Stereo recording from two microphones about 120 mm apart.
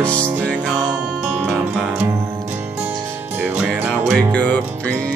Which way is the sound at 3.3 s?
15° right (ahead or behind).